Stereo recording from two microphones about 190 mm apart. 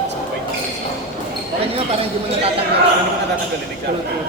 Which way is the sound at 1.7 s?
30° right (ahead or behind).